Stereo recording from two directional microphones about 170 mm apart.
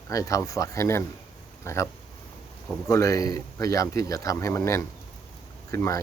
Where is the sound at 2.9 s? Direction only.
20° left (ahead or behind).